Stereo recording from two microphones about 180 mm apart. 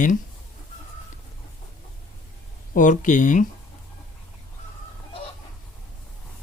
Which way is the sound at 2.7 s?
45° left (ahead or behind).